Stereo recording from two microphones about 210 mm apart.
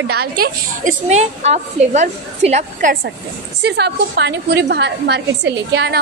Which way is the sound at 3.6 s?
50° right (ahead or behind).